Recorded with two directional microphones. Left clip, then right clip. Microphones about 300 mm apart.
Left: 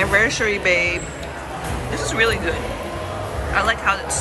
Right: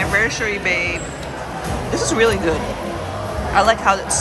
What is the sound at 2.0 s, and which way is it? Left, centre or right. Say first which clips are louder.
Speech: right 2 dB; centre.